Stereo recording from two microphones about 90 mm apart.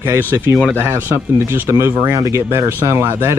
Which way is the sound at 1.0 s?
20° right (ahead or behind).